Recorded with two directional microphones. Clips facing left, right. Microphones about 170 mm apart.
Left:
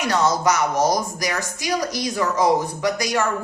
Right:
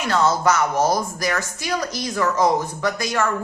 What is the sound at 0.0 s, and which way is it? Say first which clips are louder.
A woman's voice: right 1 dB; 15° left (ahead or behind).